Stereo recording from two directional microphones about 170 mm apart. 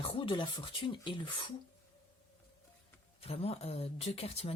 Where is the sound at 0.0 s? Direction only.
30° left (ahead or behind).